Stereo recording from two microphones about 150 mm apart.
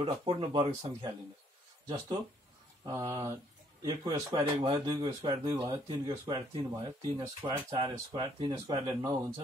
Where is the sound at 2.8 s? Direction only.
25° right (ahead or behind).